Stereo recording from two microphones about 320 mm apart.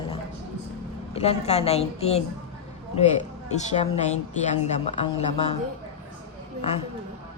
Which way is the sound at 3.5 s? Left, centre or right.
Left.